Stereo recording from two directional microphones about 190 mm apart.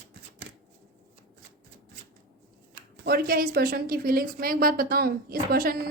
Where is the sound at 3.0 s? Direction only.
55° right (ahead or behind).